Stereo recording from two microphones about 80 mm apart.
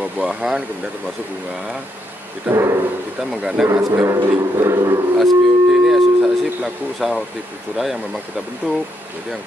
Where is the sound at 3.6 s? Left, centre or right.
Centre.